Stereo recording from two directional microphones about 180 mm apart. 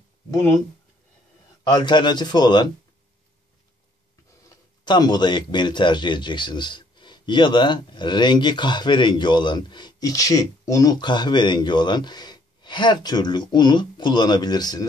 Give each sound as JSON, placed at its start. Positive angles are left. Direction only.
{"t": 0.3, "sound": "speech", "side_deg": 15}
{"t": 1.6, "sound": "speech", "side_deg": 25}
{"t": 4.5, "sound": "speech", "side_deg": 25}